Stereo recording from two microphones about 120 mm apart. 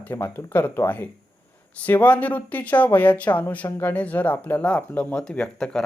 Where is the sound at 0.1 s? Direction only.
20° left (ahead or behind).